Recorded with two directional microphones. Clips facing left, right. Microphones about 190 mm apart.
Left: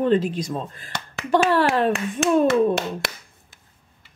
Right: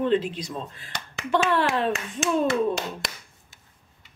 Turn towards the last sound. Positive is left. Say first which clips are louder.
# left 5 dB
turn(degrees=60)  # may be behind; listen again after turning